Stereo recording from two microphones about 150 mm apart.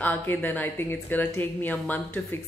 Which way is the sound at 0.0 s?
10° left (ahead or behind).